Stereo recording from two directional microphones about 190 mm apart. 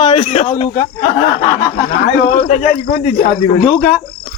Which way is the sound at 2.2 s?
35° left (ahead or behind).